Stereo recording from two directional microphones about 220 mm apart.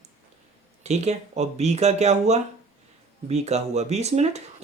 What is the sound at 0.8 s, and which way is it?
Speech, 30° right (ahead or behind).